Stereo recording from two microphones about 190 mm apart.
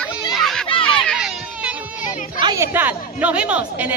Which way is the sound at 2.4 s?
20° right (ahead or behind).